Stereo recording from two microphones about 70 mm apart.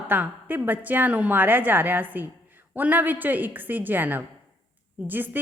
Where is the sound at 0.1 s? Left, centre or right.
Right.